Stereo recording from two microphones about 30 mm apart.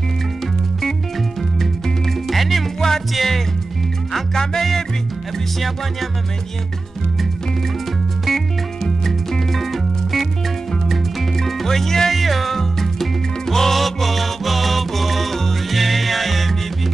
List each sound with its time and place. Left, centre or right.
2.2 s music: centre
8.8 s music: centre
11.3 s music: centre
12.1 s music: centre